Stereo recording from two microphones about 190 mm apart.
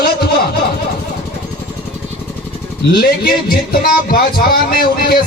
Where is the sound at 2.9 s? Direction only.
55° left (ahead or behind).